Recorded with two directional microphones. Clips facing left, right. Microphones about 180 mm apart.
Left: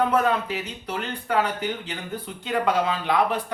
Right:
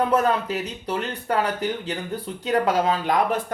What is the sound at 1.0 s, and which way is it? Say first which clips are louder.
Speech: even; 40° right (ahead or behind).